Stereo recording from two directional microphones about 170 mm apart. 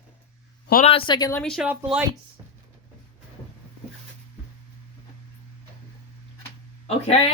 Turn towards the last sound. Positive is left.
turn(degrees=35)  # may be behind; listen again after turning